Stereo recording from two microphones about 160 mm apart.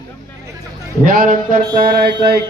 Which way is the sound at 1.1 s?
60° right (ahead or behind).